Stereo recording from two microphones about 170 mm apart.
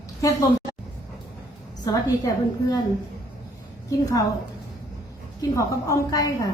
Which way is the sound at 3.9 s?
20° left (ahead or behind).